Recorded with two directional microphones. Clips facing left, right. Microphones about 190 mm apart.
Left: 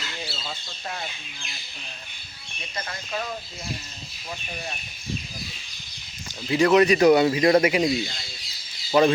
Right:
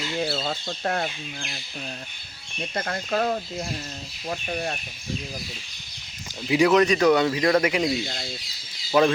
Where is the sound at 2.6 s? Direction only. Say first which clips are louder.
Right 7 dB; 55° right (ahead or behind).